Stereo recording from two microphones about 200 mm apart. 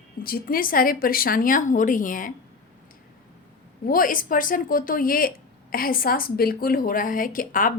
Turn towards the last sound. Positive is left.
turn(degrees=45)  # may be behind; listen again after turning